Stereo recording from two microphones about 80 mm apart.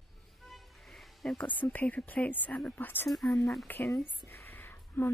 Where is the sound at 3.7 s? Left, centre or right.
Left.